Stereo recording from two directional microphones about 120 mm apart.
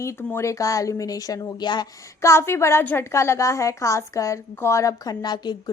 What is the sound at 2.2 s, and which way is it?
A woman's voice, 20° left (ahead or behind).